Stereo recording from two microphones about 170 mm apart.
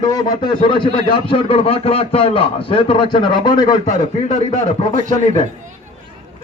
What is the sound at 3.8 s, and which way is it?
Speech, 45° left (ahead or behind).